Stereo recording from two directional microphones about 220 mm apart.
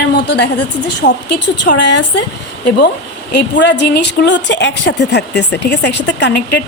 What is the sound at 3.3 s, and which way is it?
A woman's voice, 50° left (ahead or behind).